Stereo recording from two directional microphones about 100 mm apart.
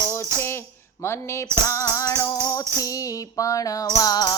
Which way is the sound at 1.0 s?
30° left (ahead or behind).